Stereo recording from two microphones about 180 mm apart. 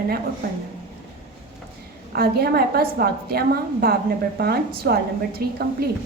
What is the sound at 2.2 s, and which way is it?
A woman's voice, 60° right (ahead or behind).